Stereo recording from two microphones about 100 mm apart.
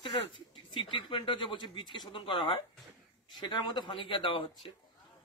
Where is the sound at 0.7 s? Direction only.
55° left (ahead or behind).